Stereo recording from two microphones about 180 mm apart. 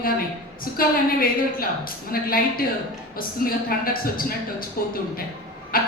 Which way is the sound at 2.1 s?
55° left (ahead or behind).